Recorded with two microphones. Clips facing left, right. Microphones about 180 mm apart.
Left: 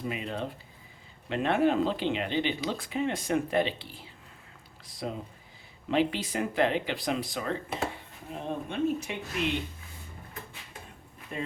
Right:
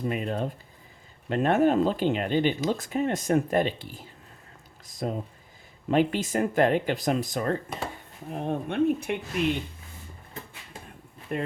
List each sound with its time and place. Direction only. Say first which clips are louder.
0.1 s speech: right 5 dB; 45° right (ahead or behind)
8.3 s speech: right 5 dB; 55° right (ahead or behind)
11.3 s speech: right 5 dB; 60° right (ahead or behind)